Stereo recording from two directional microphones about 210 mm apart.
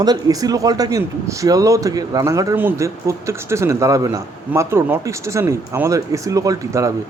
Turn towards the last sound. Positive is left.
turn(degrees=-15)  # may be behind; listen again after turning